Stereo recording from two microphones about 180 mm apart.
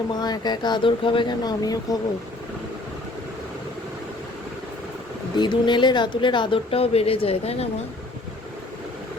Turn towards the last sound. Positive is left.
turn(degrees=35)  # may be behind; listen again after turning